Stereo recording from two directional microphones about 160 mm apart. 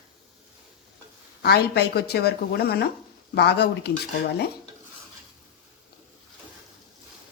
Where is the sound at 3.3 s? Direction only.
90° left.